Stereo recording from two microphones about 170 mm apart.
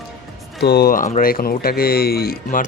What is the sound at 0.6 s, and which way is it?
Speech, 70° left (ahead or behind).